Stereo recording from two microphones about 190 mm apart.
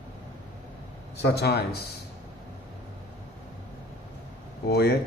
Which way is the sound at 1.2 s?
60° left (ahead or behind).